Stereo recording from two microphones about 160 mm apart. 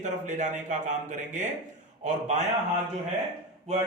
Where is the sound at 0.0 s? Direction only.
50° right (ahead or behind).